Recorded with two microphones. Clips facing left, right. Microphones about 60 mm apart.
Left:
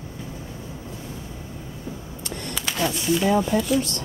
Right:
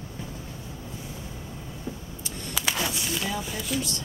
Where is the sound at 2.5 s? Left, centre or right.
Centre.